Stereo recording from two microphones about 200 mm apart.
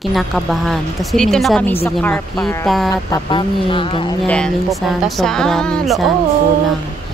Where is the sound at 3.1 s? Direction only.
25° left (ahead or behind).